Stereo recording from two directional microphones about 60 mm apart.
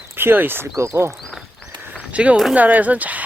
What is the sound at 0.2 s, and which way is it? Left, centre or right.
Speech, right.